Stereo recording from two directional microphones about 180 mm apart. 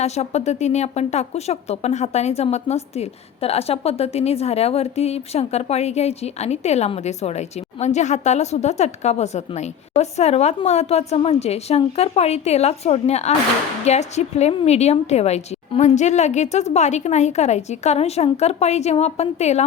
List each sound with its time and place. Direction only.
0.0 s speech: 35° left (ahead or behind)